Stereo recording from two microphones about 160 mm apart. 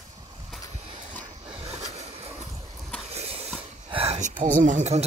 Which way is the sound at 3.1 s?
40° right (ahead or behind).